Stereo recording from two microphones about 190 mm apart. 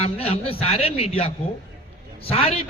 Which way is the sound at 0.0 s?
30° left (ahead or behind).